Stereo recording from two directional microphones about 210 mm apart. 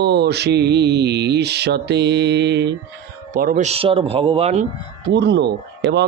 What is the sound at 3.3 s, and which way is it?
Speech, 40° right (ahead or behind).